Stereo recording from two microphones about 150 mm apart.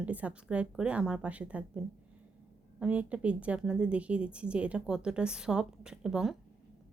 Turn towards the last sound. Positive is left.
turn(degrees=-5)  # may be behind; listen again after turning